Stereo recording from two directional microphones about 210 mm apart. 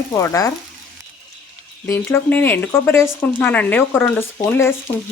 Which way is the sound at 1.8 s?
10° left (ahead or behind).